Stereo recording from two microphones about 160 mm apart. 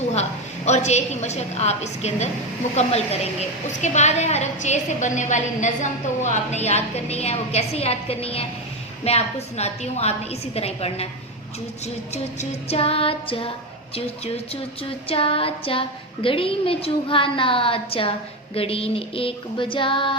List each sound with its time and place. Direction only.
0.1 s a woman's voice: 45° left (ahead or behind)
12.1 s a woman's voice: 45° left (ahead or behind)
15.1 s a woman's voice: 35° left (ahead or behind)